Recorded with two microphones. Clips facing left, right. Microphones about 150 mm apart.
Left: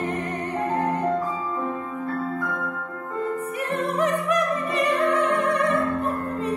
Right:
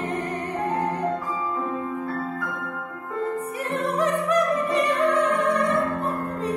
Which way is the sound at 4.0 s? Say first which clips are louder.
Right 1 dB; 35° right (ahead or behind).